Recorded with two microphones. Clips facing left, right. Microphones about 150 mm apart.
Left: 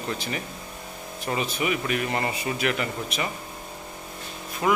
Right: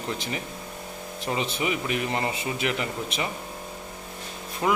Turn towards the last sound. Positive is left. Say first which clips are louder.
# left 1 dB
turn(degrees=-25)  # may be behind; listen again after turning